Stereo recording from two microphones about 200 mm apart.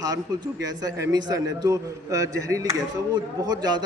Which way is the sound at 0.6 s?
20° right (ahead or behind).